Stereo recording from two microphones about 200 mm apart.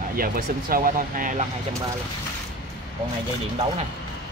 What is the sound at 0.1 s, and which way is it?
Speech, 45° right (ahead or behind).